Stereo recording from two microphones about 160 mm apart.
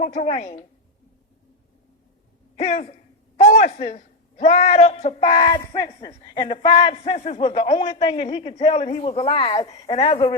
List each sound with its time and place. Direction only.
0.0 s a woman's voice: 45° left (ahead or behind)
2.6 s a woman's voice: 45° left (ahead or behind)